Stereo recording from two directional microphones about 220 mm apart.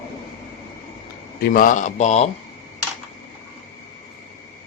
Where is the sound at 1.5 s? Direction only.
35° left (ahead or behind).